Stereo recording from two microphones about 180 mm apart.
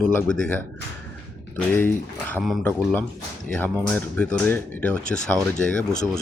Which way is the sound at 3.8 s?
5° left (ahead or behind).